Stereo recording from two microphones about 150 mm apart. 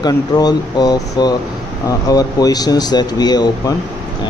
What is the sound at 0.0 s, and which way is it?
Speech, 25° left (ahead or behind).